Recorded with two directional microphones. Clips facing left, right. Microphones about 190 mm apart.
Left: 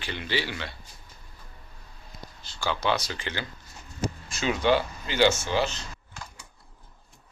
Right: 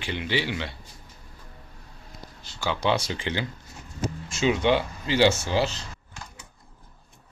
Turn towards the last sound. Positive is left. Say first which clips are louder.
# right 1 dB
turn(degrees=-35)  # may be behind; listen again after turning